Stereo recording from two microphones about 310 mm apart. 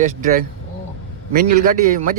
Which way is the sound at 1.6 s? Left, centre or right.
Right.